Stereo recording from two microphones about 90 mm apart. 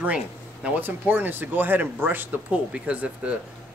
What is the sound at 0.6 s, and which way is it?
A man's voice, 20° right (ahead or behind).